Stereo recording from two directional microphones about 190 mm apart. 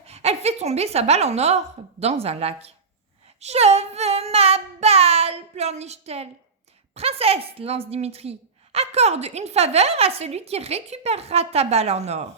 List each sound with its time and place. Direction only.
0.0 s a woman's voice: 35° right (ahead or behind)